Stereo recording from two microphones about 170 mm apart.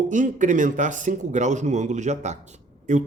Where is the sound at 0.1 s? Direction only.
45° right (ahead or behind).